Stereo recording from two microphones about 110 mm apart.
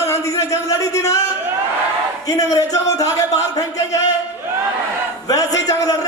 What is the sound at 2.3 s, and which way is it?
Speech, 30° left (ahead or behind).